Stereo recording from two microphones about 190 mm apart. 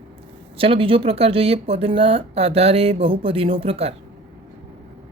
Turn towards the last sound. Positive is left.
turn(degrees=-30)  # may be behind; listen again after turning